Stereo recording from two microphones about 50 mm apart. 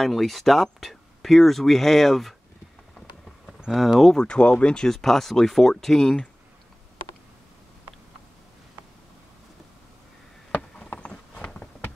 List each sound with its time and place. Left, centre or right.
0.0 s speech: centre
3.7 s speech: centre
4.3 s speech: left
4.9 s speech: centre
10.8 s horse: left